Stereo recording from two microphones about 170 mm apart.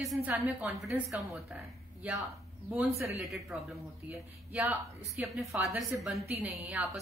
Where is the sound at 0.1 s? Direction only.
15° right (ahead or behind).